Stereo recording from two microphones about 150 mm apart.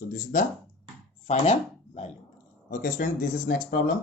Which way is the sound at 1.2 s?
45° left (ahead or behind).